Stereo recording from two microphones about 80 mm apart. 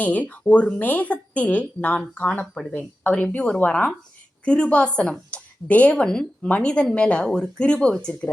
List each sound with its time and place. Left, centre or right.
0.0 s a woman's voice: centre